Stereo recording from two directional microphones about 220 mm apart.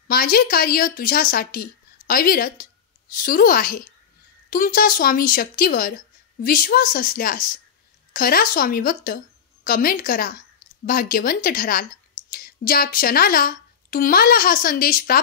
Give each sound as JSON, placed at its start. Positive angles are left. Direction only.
{"t": 0.1, "sound": "a woman's voice", "side_deg": 40}